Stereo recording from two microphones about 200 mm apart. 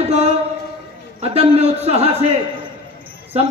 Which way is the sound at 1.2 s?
30° right (ahead or behind).